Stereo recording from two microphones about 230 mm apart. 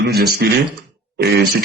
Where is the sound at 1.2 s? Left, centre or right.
Right.